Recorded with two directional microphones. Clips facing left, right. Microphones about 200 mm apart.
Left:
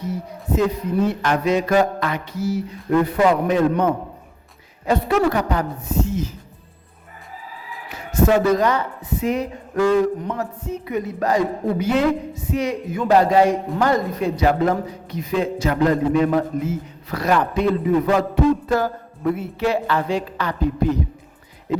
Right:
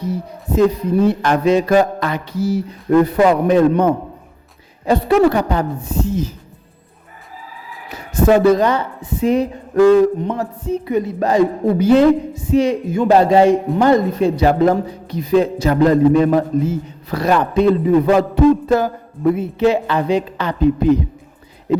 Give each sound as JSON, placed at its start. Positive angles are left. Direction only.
{"t": 0.0, "sound": "a sound", "side_deg": -35}
{"t": 1.0, "sound": "mantra", "side_deg": -35}
{"t": 4.9, "sound": "a man's voice", "side_deg": -30}
{"t": 8.1, "sound": "a man's voice", "side_deg": -30}